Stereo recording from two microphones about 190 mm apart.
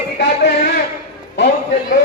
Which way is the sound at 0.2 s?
60° left (ahead or behind).